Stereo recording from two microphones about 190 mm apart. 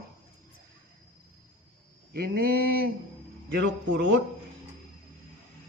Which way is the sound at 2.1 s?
55° right (ahead or behind).